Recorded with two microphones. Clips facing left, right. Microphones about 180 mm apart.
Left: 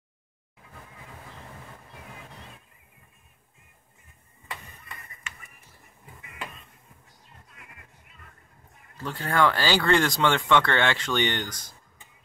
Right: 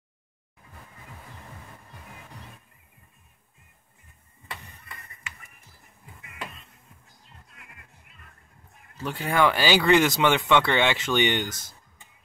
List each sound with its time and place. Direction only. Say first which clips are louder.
9.0 s speech: right 1 dB; 15° right (ahead or behind)